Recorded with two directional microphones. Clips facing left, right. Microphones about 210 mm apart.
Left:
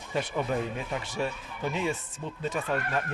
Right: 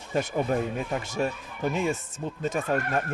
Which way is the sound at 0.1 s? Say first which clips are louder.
Right 3 dB; 45° right (ahead or behind).